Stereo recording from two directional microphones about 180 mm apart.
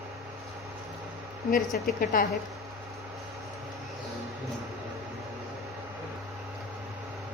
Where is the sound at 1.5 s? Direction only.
50° left (ahead or behind).